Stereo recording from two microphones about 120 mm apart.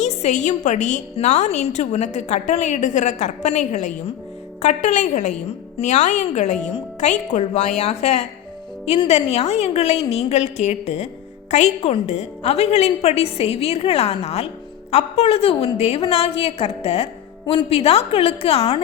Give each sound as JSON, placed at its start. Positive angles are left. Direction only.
{"t": 0.0, "sound": "a woman's voice", "side_deg": 70}